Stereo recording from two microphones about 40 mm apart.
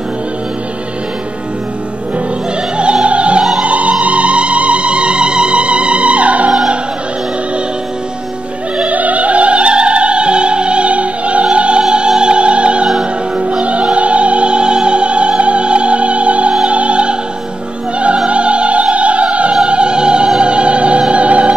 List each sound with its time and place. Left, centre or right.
2.8 s music: right
8.8 s opera: right
11.5 s music: right